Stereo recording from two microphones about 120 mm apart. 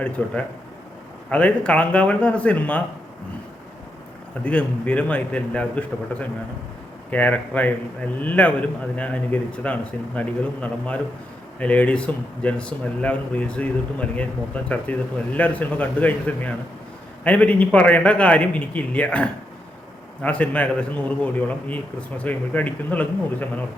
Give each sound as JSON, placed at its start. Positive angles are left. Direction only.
{"t": 0.2, "sound": "speech", "side_deg": 10}
{"t": 4.4, "sound": "speech", "side_deg": 10}